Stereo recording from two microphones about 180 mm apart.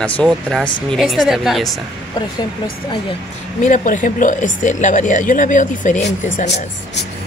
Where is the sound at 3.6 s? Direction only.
45° left (ahead or behind).